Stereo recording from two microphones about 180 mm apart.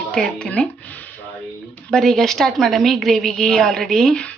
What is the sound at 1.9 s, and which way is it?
Speech, centre (ahead or behind).